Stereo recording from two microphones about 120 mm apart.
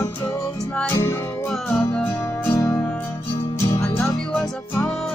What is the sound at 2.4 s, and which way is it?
Music, 20° left (ahead or behind).